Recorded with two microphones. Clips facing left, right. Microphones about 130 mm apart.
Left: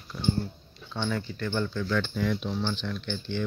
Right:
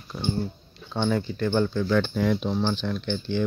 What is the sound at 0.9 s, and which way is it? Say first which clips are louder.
Speech: right 6 dB; 35° right (ahead or behind).